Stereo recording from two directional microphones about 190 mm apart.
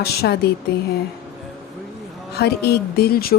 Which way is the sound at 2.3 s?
60° left (ahead or behind).